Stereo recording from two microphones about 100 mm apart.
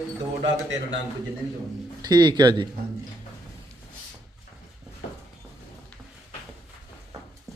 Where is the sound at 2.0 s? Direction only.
45° right (ahead or behind).